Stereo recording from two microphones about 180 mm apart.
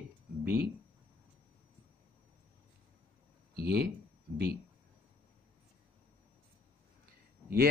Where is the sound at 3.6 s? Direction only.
60° right (ahead or behind).